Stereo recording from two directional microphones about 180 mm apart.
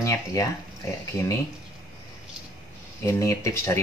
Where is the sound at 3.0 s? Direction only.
15° left (ahead or behind).